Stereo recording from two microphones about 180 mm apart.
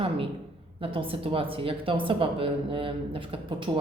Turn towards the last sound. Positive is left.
turn(degrees=-25)  # may be behind; listen again after turning